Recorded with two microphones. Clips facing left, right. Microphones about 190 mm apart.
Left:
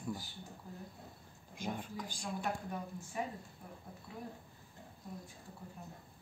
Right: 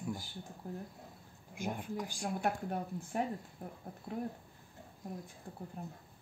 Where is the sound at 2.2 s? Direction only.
60° right (ahead or behind).